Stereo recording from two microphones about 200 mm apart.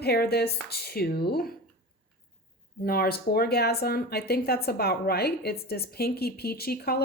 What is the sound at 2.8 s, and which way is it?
Speech, 50° left (ahead or behind).